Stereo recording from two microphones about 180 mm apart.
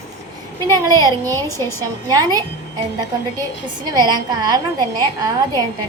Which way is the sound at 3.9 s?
20° right (ahead or behind).